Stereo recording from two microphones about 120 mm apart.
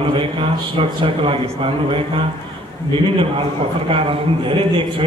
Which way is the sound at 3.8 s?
50° right (ahead or behind).